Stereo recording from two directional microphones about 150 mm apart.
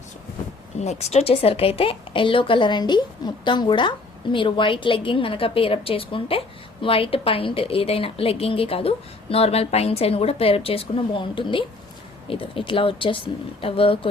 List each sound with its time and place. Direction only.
0.8 s a woman's voice: 45° left (ahead or behind)